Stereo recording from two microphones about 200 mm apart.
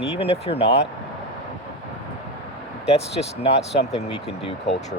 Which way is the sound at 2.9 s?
30° left (ahead or behind).